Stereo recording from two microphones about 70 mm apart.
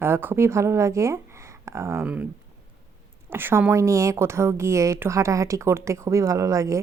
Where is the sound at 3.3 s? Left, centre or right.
Right.